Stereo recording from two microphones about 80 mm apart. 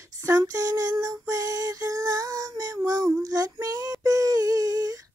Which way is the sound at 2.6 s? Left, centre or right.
Right.